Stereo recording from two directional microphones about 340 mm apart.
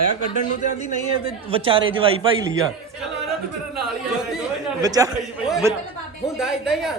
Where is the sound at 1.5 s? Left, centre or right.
Centre.